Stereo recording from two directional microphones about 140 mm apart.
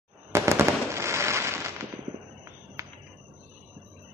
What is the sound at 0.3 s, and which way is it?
Fireworks, 20° right (ahead or behind).